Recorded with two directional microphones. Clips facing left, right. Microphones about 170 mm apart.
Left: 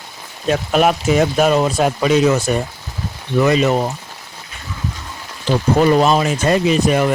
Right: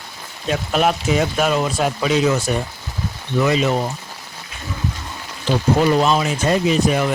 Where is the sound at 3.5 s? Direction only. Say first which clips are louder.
Left 3 dB; 50° left (ahead or behind).